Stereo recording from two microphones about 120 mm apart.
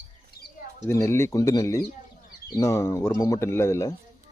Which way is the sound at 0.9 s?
25° left (ahead or behind).